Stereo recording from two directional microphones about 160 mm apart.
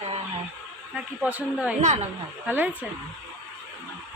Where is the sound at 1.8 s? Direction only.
45° right (ahead or behind).